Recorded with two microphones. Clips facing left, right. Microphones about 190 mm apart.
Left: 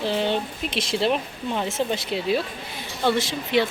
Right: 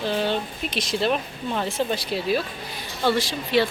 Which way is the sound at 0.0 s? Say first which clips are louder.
Left 1 dB; 25° left (ahead or behind).